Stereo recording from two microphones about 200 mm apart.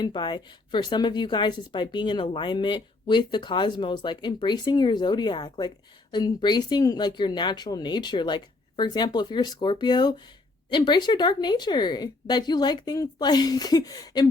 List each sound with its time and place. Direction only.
0.0 s speech: 20° left (ahead or behind)